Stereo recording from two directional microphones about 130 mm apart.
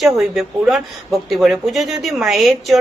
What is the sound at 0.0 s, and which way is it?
Speech, centre (ahead or behind).